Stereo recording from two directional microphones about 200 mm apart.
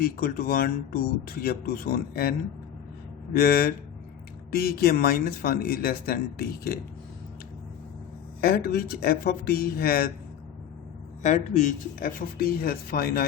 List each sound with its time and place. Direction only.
0.0 s speech: 45° left (ahead or behind)
3.3 s speech: 50° left (ahead or behind)
8.4 s speech: 50° left (ahead or behind)
11.2 s speech: 35° left (ahead or behind)